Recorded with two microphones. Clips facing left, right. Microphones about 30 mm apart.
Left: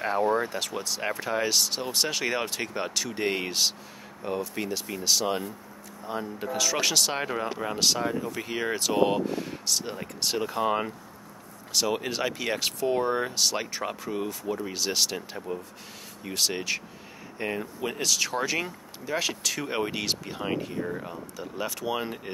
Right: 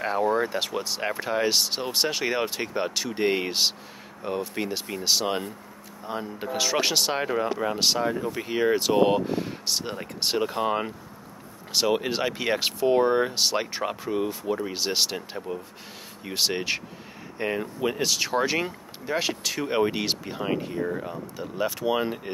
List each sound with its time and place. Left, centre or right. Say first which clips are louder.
0.4 s speech: right 4 dB; centre
7.2 s speech: right 4 dB; centre
11.9 s speech: right 3 dB; centre
16.3 s speech: right 2 dB; centre